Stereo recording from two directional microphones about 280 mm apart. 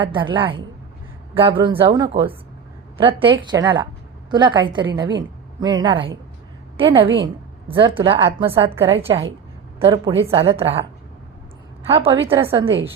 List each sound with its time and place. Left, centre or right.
0.0 s a woman's voice: centre
11.9 s a woman's voice: centre